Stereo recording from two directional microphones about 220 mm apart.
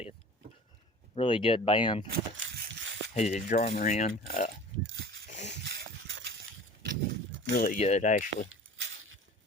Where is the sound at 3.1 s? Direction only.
30° left (ahead or behind).